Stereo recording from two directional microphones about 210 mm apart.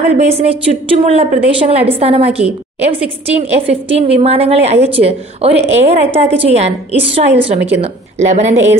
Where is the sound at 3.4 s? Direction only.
30° right (ahead or behind).